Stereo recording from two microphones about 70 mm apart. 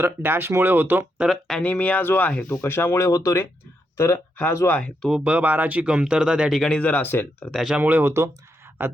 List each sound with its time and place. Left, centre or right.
0.0 s speech: right
1.3 s speech: centre
1.6 s speech: left
2.5 s speech: left
3.1 s speech: left
3.9 s speech: left
5.2 s speech: right
5.8 s speech: centre
6.5 s speech: centre
6.7 s speech: left
7.5 s speech: centre
7.8 s speech: right